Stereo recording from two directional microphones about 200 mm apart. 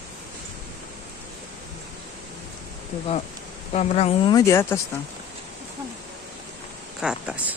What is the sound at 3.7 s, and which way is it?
Speech, 30° left (ahead or behind).